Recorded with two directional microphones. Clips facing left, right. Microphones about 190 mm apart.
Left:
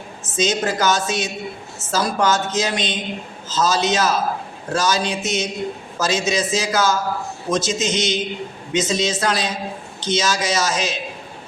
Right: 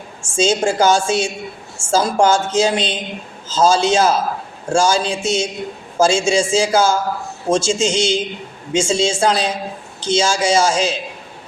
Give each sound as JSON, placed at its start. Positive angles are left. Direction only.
{"t": 0.2, "sound": "a woman's voice", "side_deg": -30}